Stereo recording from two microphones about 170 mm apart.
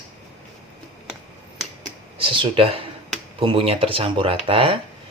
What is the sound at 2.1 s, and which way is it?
Speech, 30° right (ahead or behind).